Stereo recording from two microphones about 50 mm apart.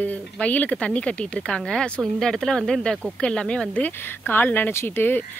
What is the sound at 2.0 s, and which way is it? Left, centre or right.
Speech, centre.